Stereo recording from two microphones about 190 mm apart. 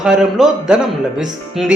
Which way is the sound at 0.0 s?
5° right (ahead or behind).